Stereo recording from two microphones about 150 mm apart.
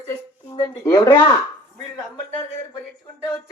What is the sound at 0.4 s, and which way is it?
Speech, 20° left (ahead or behind).